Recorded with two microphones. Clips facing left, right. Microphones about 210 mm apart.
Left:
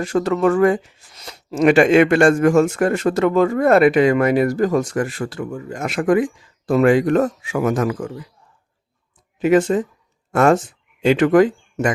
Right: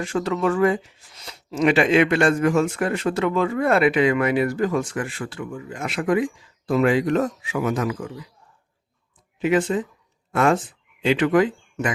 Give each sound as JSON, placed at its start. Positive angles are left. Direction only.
{"t": 0.0, "sound": "speech", "side_deg": 45}
{"t": 9.4, "sound": "speech", "side_deg": 45}